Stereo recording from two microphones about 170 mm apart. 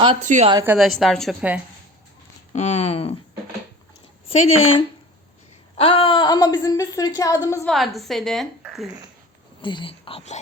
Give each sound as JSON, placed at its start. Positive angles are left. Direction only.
{"t": 0.2, "sound": "a woman's voice", "side_deg": -45}
{"t": 0.8, "sound": "a woman's voice", "side_deg": 0}
{"t": 2.5, "sound": "speech", "side_deg": 40}
{"t": 4.3, "sound": "a woman's voice", "side_deg": 35}
{"t": 7.6, "sound": "a woman's voice", "side_deg": 0}
{"t": 9.6, "sound": "speech", "side_deg": 30}